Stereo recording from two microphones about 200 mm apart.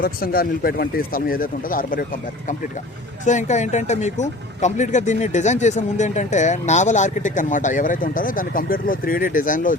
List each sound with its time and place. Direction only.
0.0 s speech: 50° left (ahead or behind)
3.2 s speech: 35° left (ahead or behind)